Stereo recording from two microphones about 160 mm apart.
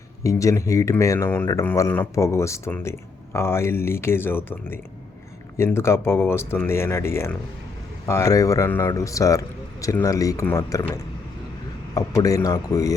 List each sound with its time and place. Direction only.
0.2 s speech: 20° left (ahead or behind)